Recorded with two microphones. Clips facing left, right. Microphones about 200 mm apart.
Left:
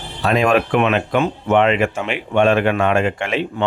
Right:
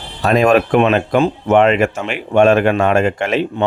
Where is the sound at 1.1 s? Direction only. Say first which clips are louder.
Right 3 dB; 40° right (ahead or behind).